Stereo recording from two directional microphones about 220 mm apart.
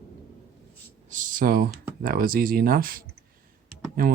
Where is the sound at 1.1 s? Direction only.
35° right (ahead or behind).